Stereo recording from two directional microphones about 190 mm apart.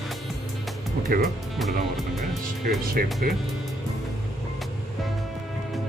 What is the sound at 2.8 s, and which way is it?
Speech, 50° right (ahead or behind).